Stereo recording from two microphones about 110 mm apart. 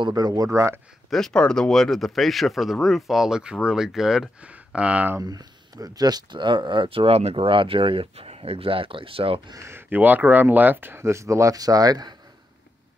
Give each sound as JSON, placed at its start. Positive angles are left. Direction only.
{"t": 0.0, "sound": "speech", "side_deg": -35}
{"t": 1.1, "sound": "speech", "side_deg": 5}
{"t": 5.2, "sound": "speech", "side_deg": -35}
{"t": 9.5, "sound": "speech", "side_deg": -25}